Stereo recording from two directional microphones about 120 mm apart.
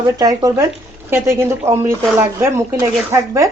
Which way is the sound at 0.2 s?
30° right (ahead or behind).